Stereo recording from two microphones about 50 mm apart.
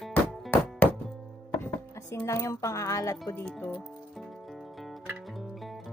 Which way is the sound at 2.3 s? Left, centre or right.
Left.